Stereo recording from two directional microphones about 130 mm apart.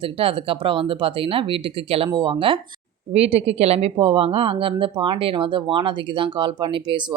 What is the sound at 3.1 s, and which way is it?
A woman's voice, 55° right (ahead or behind).